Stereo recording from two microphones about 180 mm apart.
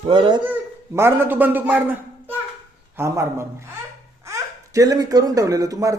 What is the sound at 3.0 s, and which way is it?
Speech, 15° right (ahead or behind).